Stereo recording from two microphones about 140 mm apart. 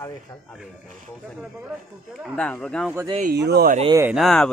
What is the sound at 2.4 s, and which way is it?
Speech, 5° left (ahead or behind).